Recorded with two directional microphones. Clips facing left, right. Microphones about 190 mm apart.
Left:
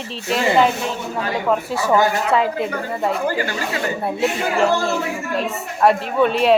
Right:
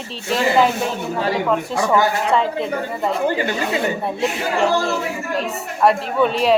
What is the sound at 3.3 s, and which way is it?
Speech, 20° right (ahead or behind).